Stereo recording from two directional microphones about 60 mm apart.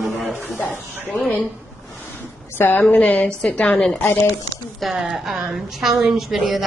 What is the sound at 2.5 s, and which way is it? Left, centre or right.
A woman's voice, left.